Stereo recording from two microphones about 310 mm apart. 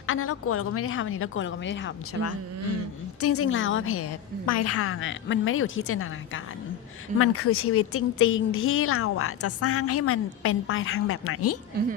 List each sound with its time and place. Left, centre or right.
0.0 s a woman's voice: left
3.2 s speech: left